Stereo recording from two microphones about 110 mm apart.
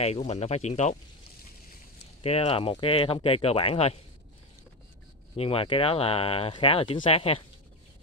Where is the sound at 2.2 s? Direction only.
65° left (ahead or behind).